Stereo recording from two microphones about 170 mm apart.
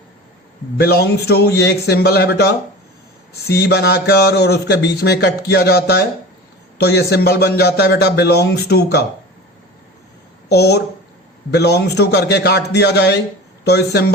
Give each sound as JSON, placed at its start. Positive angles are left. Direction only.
{"t": 0.8, "sound": "a man's voice", "side_deg": 70}
{"t": 10.5, "sound": "a man's voice", "side_deg": 70}